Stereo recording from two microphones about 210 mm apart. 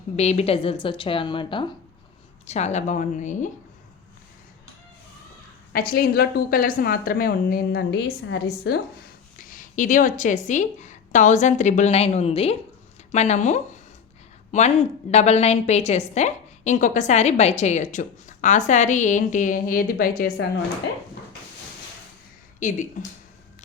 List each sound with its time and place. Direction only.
0.2 s a woman's voice: 30° left (ahead or behind)
5.7 s a woman's voice: 45° left (ahead or behind)
9.4 s a woman's voice: 40° left (ahead or behind)
22.6 s a woman's voice: 40° left (ahead or behind)